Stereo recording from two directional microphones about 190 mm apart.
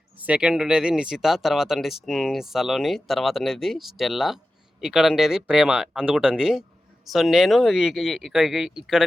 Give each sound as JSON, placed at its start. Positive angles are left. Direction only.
{"t": 0.2, "sound": "speech", "side_deg": -5}